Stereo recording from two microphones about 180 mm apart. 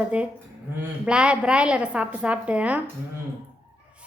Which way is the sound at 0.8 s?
5° right (ahead or behind).